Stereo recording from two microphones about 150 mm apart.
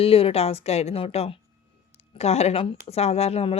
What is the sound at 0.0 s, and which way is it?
A woman's voice, 40° left (ahead or behind).